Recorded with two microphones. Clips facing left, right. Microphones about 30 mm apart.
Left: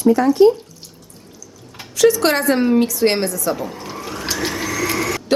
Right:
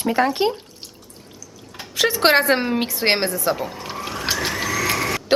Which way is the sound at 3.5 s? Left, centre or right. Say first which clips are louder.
Left 1 dB; centre.